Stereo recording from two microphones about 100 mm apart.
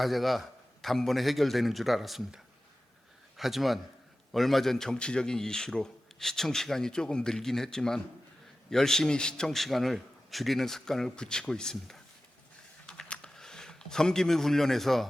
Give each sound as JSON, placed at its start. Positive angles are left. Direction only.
{"t": 0.0, "sound": "a man's voice", "side_deg": 0}
{"t": 12.8, "sound": "computer keyboard", "side_deg": 10}